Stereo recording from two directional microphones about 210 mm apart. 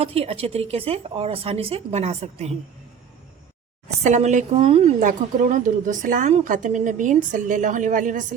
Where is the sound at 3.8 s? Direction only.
30° right (ahead or behind).